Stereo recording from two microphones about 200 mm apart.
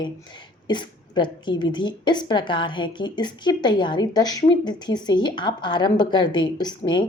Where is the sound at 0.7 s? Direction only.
20° left (ahead or behind).